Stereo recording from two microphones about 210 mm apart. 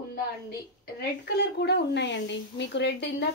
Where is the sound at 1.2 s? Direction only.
55° left (ahead or behind).